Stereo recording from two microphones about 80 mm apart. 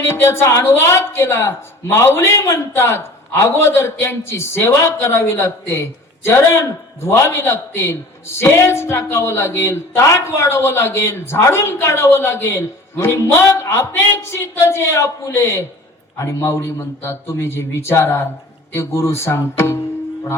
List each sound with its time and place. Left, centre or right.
0.0 s a woman's voice: left